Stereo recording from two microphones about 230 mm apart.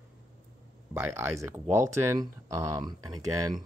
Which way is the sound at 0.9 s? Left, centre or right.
Centre.